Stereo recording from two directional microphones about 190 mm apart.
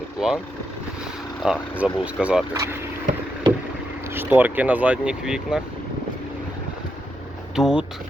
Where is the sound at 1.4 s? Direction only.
Centre (ahead or behind).